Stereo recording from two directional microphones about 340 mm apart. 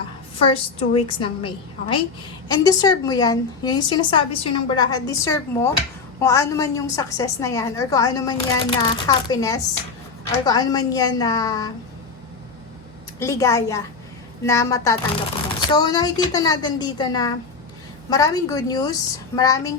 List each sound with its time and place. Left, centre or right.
0.3 s a woman's voice: centre
13.1 s a woman's voice: centre